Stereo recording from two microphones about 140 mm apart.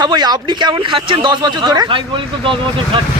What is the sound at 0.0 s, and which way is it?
A man's voice, 30° right (ahead or behind).